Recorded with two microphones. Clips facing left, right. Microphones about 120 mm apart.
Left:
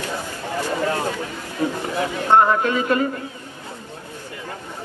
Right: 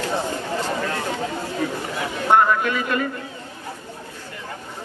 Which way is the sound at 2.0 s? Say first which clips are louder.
Left 1 dB; 25° left (ahead or behind).